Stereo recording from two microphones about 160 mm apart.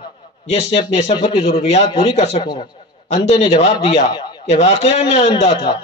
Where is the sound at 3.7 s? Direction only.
30° left (ahead or behind).